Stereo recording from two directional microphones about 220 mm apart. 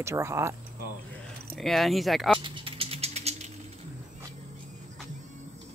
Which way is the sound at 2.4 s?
25° right (ahead or behind).